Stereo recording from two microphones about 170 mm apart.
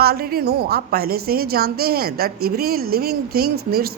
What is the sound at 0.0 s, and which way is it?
A woman's voice, 65° right (ahead or behind).